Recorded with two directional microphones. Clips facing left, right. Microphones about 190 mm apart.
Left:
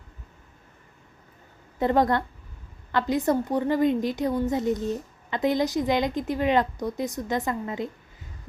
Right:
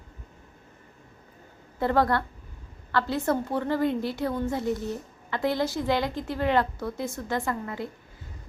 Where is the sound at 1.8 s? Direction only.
20° left (ahead or behind).